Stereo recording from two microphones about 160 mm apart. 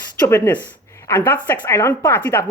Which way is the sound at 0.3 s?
15° left (ahead or behind).